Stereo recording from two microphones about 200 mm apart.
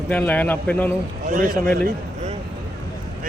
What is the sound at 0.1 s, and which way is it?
Speech, 10° left (ahead or behind).